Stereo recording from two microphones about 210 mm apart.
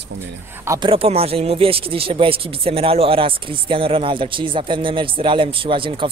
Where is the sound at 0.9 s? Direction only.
30° right (ahead or behind).